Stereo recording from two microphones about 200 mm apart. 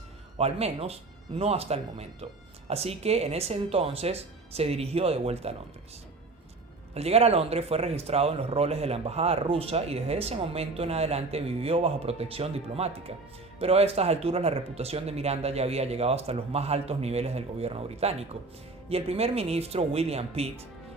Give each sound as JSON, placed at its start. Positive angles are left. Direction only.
{"t": 0.3, "sound": "a man's voice", "side_deg": -30}
{"t": 6.9, "sound": "a man's voice", "side_deg": -30}